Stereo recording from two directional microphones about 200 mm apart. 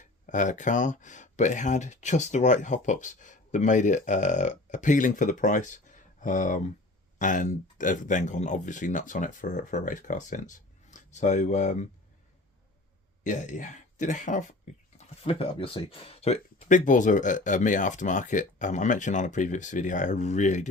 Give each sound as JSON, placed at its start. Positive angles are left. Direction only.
{"t": 0.0, "sound": "speech", "side_deg": 40}
{"t": 13.2, "sound": "speech", "side_deg": 40}